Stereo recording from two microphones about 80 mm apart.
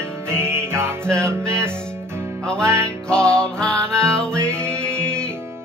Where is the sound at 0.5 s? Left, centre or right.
Right.